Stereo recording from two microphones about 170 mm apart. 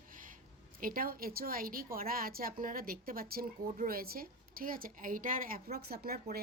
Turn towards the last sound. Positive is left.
turn(degrees=-65)  # may be behind; listen again after turning